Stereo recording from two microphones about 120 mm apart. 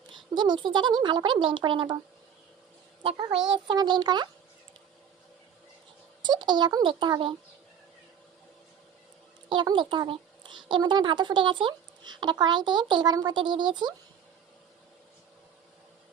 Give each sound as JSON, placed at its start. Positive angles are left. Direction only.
{"t": 0.1, "sound": "a woman's voice", "side_deg": -40}
{"t": 3.5, "sound": "a woman's voice", "side_deg": -40}
{"t": 6.2, "sound": "a woman's voice", "side_deg": -40}
{"t": 9.5, "sound": "a woman's voice", "side_deg": -40}